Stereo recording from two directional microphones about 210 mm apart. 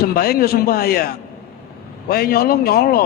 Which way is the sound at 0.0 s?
45° left (ahead or behind).